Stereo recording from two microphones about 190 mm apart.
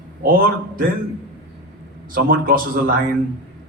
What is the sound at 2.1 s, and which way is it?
Speech, 45° right (ahead or behind).